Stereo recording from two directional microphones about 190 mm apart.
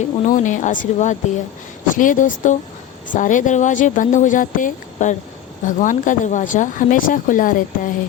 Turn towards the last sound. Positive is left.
turn(degrees=45)  # may be behind; listen again after turning